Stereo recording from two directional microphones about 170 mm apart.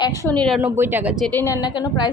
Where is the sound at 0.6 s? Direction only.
15° right (ahead or behind).